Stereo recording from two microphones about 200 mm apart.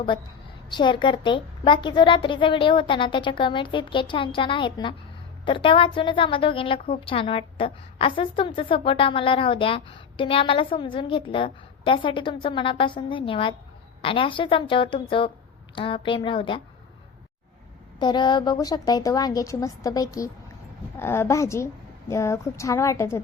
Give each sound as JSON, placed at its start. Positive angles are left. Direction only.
{"t": 0.7, "sound": "a woman's voice", "side_deg": 25}
{"t": 18.0, "sound": "a woman's voice", "side_deg": 20}